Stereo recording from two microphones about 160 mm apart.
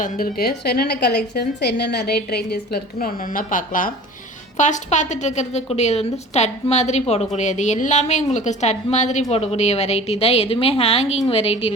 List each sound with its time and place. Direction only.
0.0 s a woman's voice: 70° left (ahead or behind); by 11.7 s 40° left (ahead or behind)